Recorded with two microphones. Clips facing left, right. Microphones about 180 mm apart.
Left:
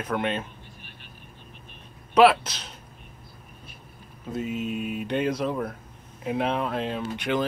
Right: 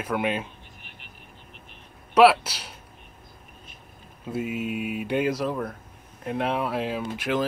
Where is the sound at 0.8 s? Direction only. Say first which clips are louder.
Left 1 dB; 15° right (ahead or behind).